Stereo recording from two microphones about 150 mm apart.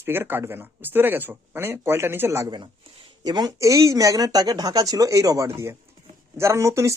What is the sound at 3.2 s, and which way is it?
Speech, 25° right (ahead or behind).